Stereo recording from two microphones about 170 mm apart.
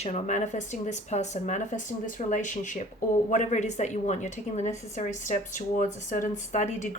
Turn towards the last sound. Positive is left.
turn(degrees=45)  # may be behind; listen again after turning